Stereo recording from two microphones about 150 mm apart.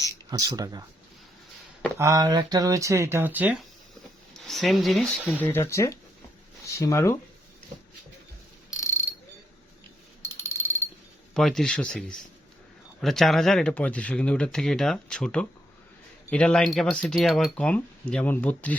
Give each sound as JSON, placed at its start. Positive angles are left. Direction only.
{"t": 0.3, "sound": "speech", "side_deg": -25}
{"t": 2.0, "sound": "speech", "side_deg": -25}
{"t": 4.4, "sound": "speech", "side_deg": 0}
{"t": 5.4, "sound": "speech", "side_deg": 15}
{"t": 10.2, "sound": "a sound", "side_deg": 20}
{"t": 11.3, "sound": "speech", "side_deg": 5}